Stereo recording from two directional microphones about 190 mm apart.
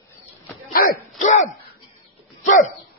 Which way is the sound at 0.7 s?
45° left (ahead or behind).